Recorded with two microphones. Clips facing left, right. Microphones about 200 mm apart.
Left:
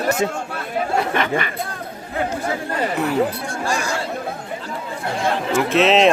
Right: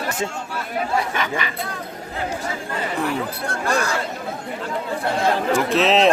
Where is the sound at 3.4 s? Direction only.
60° right (ahead or behind).